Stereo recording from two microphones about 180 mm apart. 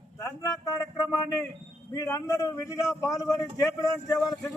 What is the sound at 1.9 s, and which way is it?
Speech, 20° left (ahead or behind).